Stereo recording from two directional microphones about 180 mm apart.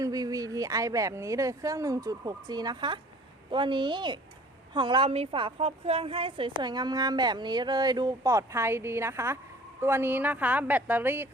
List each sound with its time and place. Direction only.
0.0 s a woman's voice: 20° right (ahead or behind)